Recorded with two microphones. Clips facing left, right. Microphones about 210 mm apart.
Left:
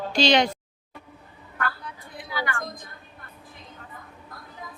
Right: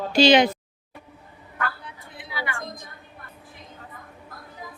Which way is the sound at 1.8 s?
25° right (ahead or behind).